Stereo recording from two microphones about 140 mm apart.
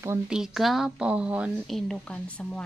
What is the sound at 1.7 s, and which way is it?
Speech, 5° left (ahead or behind).